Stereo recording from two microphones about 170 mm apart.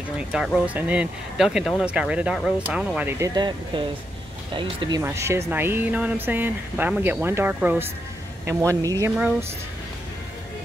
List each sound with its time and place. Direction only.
0.3 s speech: 5° right (ahead or behind)
3.1 s speech: 20° right (ahead or behind)
5.0 s speech: 15° right (ahead or behind)